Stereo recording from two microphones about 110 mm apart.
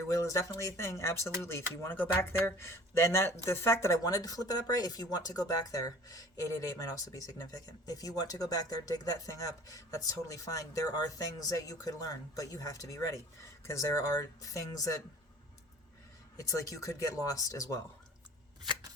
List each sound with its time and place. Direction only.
0.0 s speech: 30° left (ahead or behind)
16.4 s speech: 30° left (ahead or behind)